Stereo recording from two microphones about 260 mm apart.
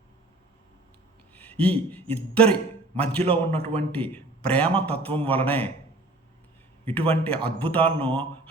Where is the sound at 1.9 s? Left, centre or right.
Centre.